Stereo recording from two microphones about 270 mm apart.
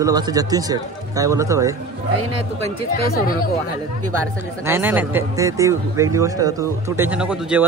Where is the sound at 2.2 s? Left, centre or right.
Right.